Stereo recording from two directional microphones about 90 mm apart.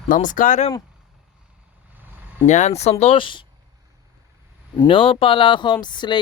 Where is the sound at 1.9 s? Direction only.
20° right (ahead or behind).